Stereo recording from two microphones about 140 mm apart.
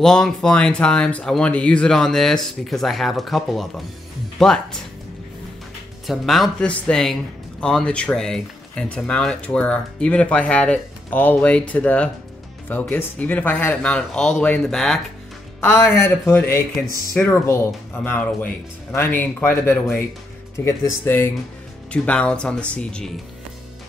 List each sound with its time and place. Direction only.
0.0 s speech: 5° left (ahead or behind)
6.0 s speech: centre (ahead or behind)